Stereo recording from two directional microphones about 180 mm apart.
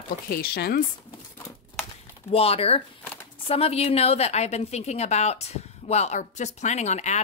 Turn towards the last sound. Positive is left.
turn(degrees=40)  # may be behind; listen again after turning